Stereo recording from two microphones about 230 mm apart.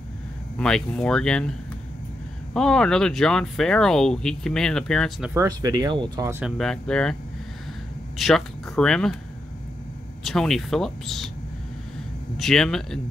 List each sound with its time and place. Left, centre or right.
0.6 s speech: centre
2.5 s speech: centre
5.3 s speech: centre
6.4 s speech: centre
8.2 s speech: centre
10.2 s speech: centre
12.4 s speech: centre